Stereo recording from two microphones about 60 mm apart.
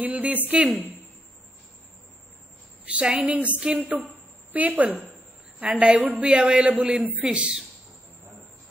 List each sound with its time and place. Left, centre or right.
0.0 s a woman's voice: right
2.9 s a woman's voice: centre
4.1 s a sound: right
5.6 s a woman's voice: centre
7.2 s a woman's voice: centre